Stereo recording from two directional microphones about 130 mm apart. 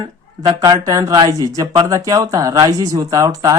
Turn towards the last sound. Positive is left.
turn(degrees=-30)  # may be behind; listen again after turning